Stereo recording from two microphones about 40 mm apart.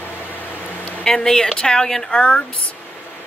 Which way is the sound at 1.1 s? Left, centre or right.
Centre.